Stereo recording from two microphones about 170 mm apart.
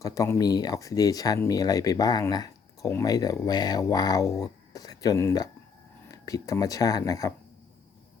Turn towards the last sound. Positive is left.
turn(degrees=20)  # may be behind; listen again after turning